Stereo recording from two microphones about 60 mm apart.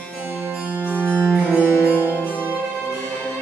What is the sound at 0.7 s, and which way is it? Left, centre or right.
Music, right.